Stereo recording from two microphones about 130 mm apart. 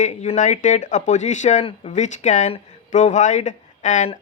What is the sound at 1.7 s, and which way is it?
Speech, 60° left (ahead or behind).